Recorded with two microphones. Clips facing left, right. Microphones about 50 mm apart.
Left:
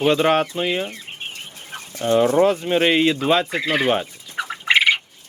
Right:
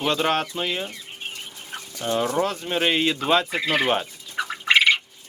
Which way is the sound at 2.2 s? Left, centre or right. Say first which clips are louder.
Left 7 dB; left.